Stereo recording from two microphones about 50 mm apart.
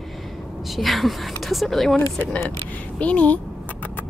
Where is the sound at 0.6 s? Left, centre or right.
Centre.